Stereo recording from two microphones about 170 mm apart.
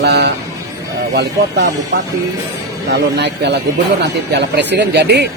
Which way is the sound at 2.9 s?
85° right.